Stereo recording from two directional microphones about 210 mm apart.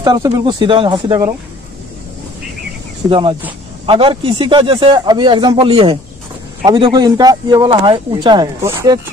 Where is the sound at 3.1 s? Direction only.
25° right (ahead or behind).